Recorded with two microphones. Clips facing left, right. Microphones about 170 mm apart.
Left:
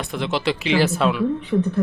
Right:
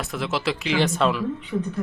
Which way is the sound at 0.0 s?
Centre (ahead or behind).